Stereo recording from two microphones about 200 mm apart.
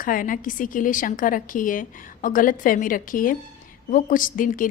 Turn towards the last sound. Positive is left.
turn(degrees=40)  # may be behind; listen again after turning